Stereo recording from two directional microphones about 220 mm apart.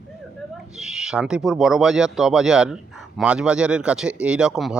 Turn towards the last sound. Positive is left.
turn(degrees=0)  # may be behind; listen again after turning